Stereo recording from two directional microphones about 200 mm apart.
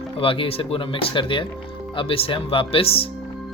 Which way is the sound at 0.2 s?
25° left (ahead or behind).